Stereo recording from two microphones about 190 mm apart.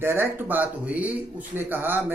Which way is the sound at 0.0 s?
10° right (ahead or behind).